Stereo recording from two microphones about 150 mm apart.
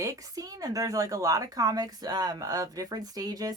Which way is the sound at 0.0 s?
20° right (ahead or behind).